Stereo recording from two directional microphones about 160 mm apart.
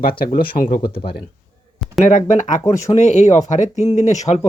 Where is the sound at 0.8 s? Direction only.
35° left (ahead or behind).